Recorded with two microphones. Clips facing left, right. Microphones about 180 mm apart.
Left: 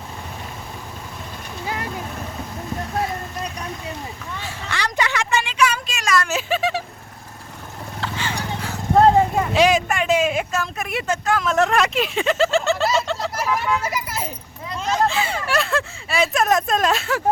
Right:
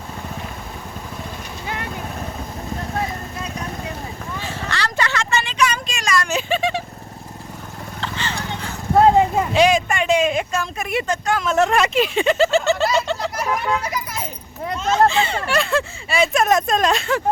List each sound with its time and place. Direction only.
4.7 s vehicle: 15° left (ahead or behind)
8.0 s horse: 10° left (ahead or behind)
9.0 s clip-clop: 15° right (ahead or behind)
9.6 s a sound: centre (ahead or behind)
14.8 s children playing: 5° left (ahead or behind)
15.4 s a sound: centre (ahead or behind)